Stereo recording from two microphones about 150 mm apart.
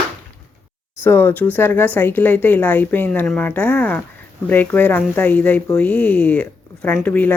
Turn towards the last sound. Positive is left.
turn(degrees=10)  # may be behind; listen again after turning